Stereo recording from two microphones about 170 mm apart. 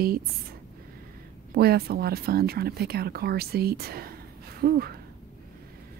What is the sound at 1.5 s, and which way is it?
A woman's voice, 65° right (ahead or behind).